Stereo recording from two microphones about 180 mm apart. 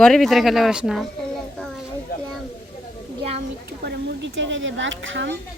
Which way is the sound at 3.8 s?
80° right.